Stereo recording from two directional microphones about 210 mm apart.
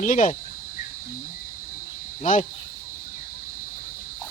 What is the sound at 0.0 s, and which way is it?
Speech, 35° left (ahead or behind).